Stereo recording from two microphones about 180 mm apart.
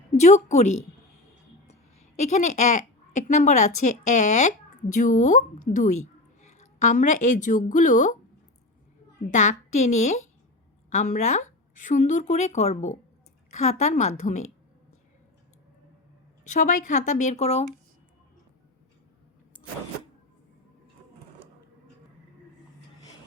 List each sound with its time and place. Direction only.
0.2 s a woman's voice: 40° left (ahead or behind)
9.3 s speech: 40° left (ahead or behind)
16.4 s speech: 40° left (ahead or behind)